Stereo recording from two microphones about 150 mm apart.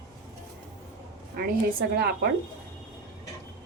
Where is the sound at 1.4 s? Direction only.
90° right.